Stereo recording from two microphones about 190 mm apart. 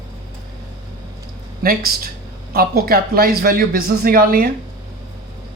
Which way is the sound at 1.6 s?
50° right (ahead or behind).